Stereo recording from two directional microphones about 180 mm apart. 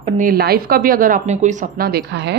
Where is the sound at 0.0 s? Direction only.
50° right (ahead or behind).